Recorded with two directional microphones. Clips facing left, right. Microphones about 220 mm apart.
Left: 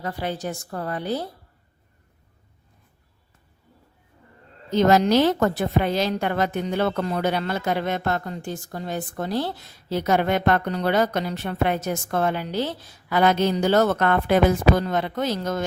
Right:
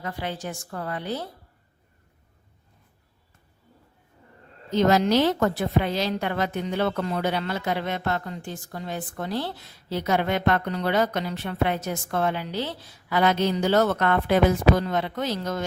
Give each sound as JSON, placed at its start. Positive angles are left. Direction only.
{"t": 0.0, "sound": "a woman's voice", "side_deg": 40}
{"t": 4.7, "sound": "a woman's voice", "side_deg": 45}